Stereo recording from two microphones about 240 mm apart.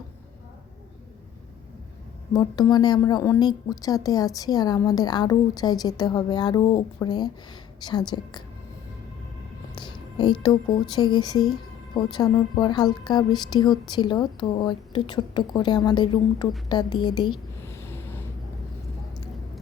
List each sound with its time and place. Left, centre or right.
2.3 s speech: centre
9.7 s speech: centre
16.6 s a sound: centre